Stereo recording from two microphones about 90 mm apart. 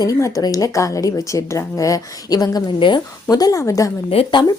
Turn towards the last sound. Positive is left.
turn(degrees=60)  # may be behind; listen again after turning